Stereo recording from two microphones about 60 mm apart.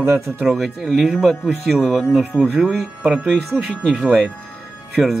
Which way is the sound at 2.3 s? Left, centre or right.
Left.